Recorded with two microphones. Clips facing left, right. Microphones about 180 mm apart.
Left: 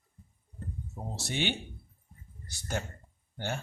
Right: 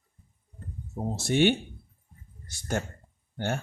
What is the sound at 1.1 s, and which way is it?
Speech, 50° right (ahead or behind).